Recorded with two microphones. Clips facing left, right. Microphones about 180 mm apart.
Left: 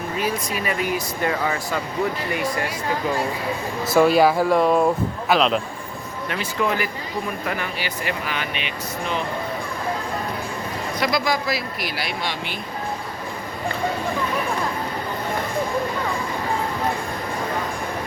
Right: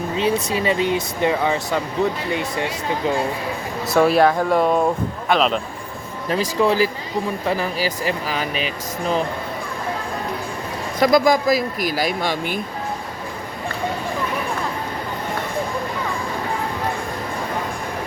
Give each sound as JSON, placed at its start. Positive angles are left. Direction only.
{"t": 0.2, "sound": "speech", "side_deg": -25}
{"t": 3.8, "sound": "speech", "side_deg": 0}
{"t": 6.2, "sound": "speech", "side_deg": -35}
{"t": 11.0, "sound": "speech", "side_deg": -45}